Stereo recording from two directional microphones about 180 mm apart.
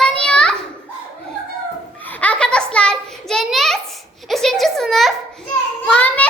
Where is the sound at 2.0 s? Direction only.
10° left (ahead or behind).